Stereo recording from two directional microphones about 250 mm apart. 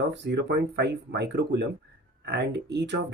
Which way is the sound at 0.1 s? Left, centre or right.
Right.